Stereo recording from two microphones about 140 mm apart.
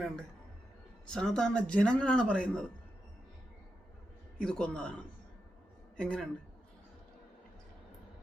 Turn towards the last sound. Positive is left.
turn(degrees=5)  # may be behind; listen again after turning